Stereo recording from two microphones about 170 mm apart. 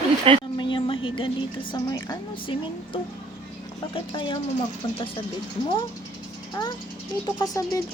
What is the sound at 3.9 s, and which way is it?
Speech, 30° left (ahead or behind).